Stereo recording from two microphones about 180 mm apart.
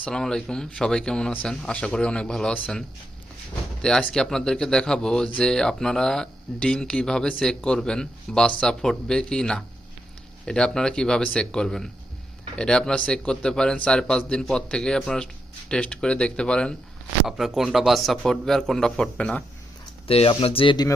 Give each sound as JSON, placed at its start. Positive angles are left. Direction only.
{"t": 0.0, "sound": "speech", "side_deg": 5}
{"t": 20.1, "sound": "speech", "side_deg": 30}